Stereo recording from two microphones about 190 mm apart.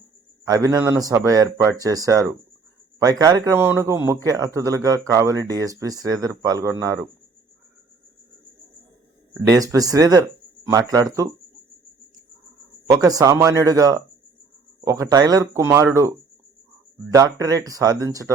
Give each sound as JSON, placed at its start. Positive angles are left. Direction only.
{"t": 0.4, "sound": "a man's voice", "side_deg": -20}
{"t": 9.5, "sound": "speech", "side_deg": -20}
{"t": 12.9, "sound": "a man's voice", "side_deg": -20}